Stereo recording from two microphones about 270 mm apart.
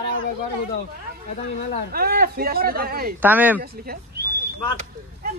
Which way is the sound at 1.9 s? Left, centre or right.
Right.